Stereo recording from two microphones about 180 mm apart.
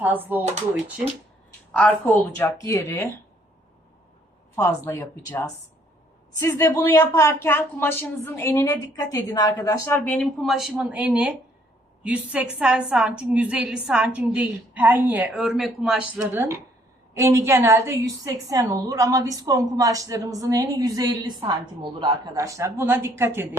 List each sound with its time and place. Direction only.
0.0 s speech: 10° right (ahead or behind)
1.7 s a woman's voice: 5° left (ahead or behind)
4.9 s a woman's voice: 10° left (ahead or behind); by 23.6 s 15° right (ahead or behind)